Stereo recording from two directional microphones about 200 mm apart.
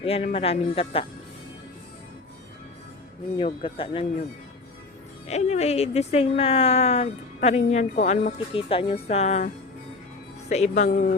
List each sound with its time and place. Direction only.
0.0 s speech: 30° left (ahead or behind)
3.3 s speech: 25° left (ahead or behind)
5.3 s speech: 35° left (ahead or behind)
10.5 s speech: 35° left (ahead or behind)